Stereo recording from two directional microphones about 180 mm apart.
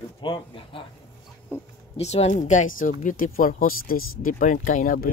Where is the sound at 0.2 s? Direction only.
30° left (ahead or behind).